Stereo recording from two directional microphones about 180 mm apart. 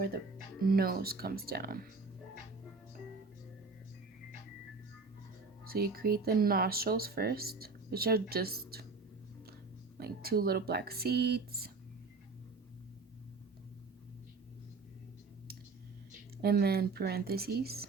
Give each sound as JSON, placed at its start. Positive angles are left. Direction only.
{"t": 0.6, "sound": "speech", "side_deg": -55}
{"t": 5.6, "sound": "speech", "side_deg": -55}
{"t": 10.0, "sound": "speech", "side_deg": -60}
{"t": 16.4, "sound": "speech", "side_deg": -60}